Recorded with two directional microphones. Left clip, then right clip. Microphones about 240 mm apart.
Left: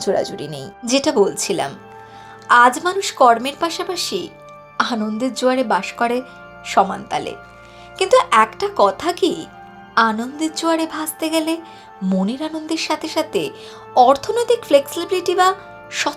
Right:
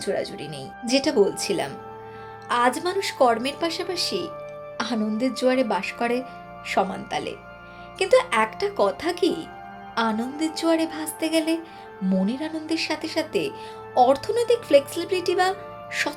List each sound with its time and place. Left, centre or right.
0.2 s speech: centre
0.9 s speech: centre